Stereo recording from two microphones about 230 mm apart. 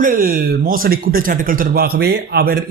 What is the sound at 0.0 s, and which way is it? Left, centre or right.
Speech, right.